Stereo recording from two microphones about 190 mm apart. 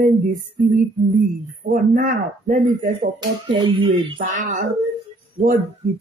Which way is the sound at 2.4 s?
35° right (ahead or behind).